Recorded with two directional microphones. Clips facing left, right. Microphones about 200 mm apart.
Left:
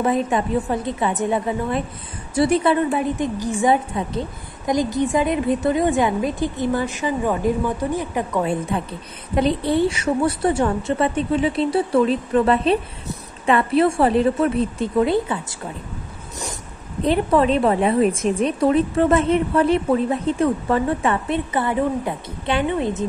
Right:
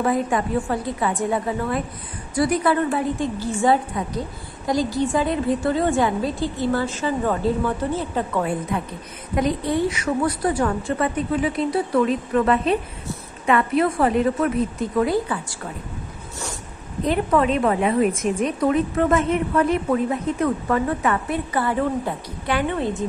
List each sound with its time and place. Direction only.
0.0 s a woman's voice: 20° left (ahead or behind)
9.3 s a woman's voice: 30° left (ahead or behind)
17.0 s a woman's voice: 30° left (ahead or behind)